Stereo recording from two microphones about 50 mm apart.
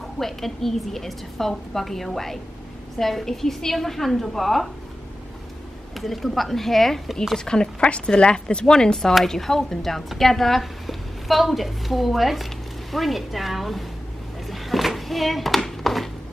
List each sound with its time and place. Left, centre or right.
0.2 s a woman's voice: centre
5.9 s a woman's voice: centre
7.3 s a woman's voice: centre
14.5 s a sound: centre